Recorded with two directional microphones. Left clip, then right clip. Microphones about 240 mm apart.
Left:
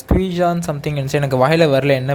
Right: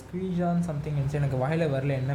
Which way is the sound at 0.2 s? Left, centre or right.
Left.